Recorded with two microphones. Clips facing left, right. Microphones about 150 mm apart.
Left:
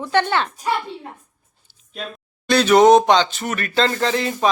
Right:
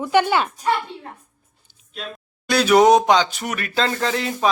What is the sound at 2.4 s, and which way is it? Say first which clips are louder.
Speech: left 2 dB; 10° right (ahead or behind).